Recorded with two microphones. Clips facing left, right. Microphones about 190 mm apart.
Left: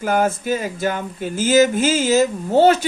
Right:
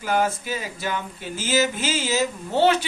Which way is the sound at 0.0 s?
50° left (ahead or behind).